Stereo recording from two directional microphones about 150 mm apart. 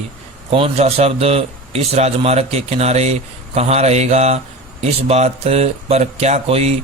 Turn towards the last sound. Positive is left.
turn(degrees=-40)  # may be behind; listen again after turning